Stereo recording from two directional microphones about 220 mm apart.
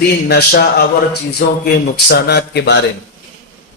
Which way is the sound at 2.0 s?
50° left (ahead or behind).